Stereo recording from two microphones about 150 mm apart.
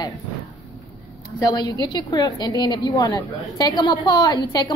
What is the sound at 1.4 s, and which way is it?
A woman's voice, 25° left (ahead or behind).